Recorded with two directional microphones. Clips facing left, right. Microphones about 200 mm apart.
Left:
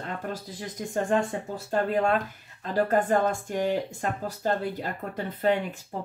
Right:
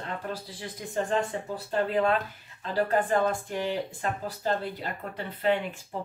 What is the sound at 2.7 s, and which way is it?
Speech, 45° left (ahead or behind).